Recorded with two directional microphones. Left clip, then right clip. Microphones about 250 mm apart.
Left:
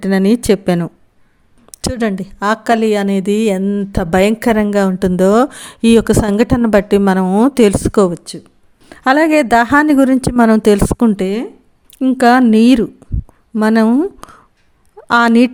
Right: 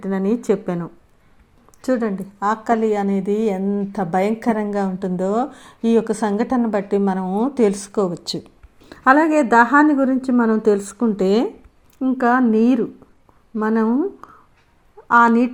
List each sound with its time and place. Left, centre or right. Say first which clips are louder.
0.0 s speech: left 8 dB; left
1.7 s speech: left 1 dB; left
2.4 s speech: left 5 dB; left
4.9 s a woman's voice: left 12 dB; left
5.5 s speech: left 7 dB; left
7.3 s a woman's voice: left 9 dB; left
8.3 s speech: right 3 dB; centre
8.9 s a woman's voice: left 3 dB; left
14.9 s a sound: left 2 dB; left
15.3 s a woman's voice: left 6 dB; left